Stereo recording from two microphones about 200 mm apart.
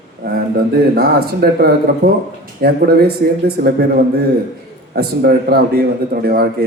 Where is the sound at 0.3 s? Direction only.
50° right (ahead or behind).